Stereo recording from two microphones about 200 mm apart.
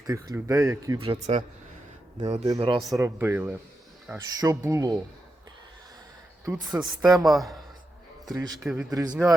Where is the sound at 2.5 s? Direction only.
25° right (ahead or behind).